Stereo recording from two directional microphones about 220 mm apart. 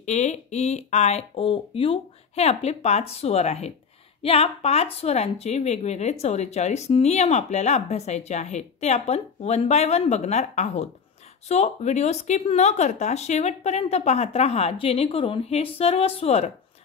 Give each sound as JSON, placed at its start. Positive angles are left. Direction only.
{"t": 0.0, "sound": "speech", "side_deg": 30}